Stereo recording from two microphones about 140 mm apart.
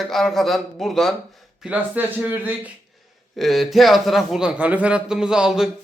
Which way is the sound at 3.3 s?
Centre (ahead or behind).